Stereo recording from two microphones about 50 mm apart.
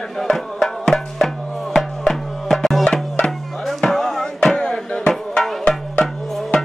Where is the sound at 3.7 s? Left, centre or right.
Centre.